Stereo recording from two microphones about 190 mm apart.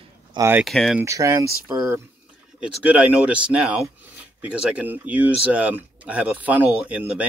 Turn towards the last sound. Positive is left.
turn(degrees=-5)  # may be behind; listen again after turning